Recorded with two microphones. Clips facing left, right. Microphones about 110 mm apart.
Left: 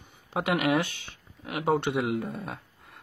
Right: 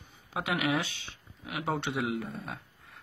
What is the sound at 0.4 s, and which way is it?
A man's voice, 50° left (ahead or behind).